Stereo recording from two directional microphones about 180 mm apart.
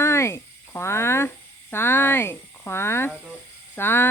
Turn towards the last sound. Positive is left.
turn(degrees=10)  # may be behind; listen again after turning